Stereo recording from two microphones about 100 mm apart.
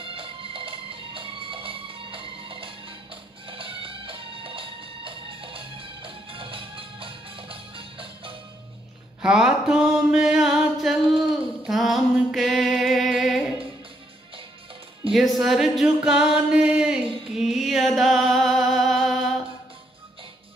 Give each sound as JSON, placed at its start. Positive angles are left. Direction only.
{"t": 0.0, "sound": "music", "side_deg": -60}
{"t": 9.2, "sound": "a sound", "side_deg": -10}
{"t": 15.1, "sound": "music", "side_deg": 0}